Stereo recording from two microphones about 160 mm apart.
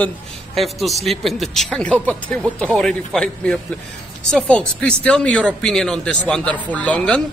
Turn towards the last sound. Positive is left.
turn(degrees=5)  # may be behind; listen again after turning